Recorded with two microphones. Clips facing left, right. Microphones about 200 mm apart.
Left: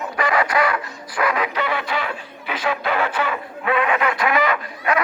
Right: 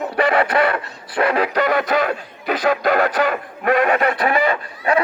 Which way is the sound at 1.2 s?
35° right (ahead or behind).